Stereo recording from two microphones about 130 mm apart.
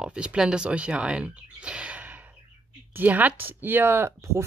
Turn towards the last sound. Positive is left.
turn(degrees=-20)  # may be behind; listen again after turning